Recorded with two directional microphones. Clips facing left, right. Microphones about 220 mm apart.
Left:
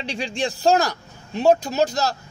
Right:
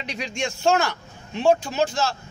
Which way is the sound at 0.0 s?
30° left (ahead or behind).